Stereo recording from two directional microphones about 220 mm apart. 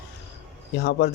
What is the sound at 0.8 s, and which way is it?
Speech, 50° left (ahead or behind).